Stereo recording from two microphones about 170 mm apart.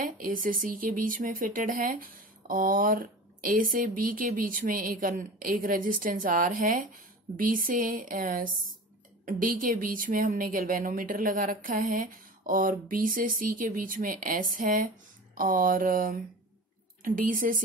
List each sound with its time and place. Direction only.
0.0 s speech: 55° right (ahead or behind)